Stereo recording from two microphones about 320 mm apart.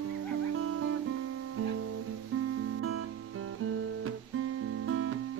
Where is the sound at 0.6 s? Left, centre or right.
Right.